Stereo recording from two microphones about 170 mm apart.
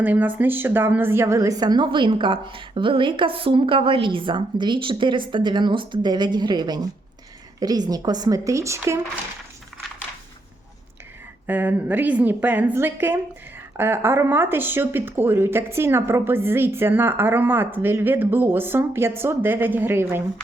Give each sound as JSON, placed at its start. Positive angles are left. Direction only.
{"t": 0.0, "sound": "a woman's voice", "side_deg": -10}
{"t": 11.4, "sound": "speech", "side_deg": -10}